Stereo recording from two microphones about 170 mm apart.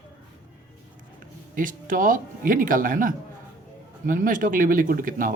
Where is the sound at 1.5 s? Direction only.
50° right (ahead or behind).